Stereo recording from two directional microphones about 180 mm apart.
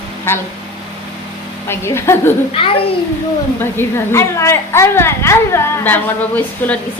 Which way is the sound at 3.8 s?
15° left (ahead or behind).